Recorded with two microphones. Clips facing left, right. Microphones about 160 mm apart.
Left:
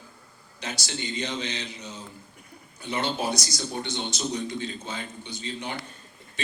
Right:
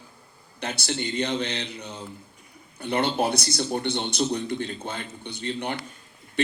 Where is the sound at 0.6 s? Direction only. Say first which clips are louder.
Right 5 dB; 55° right (ahead or behind).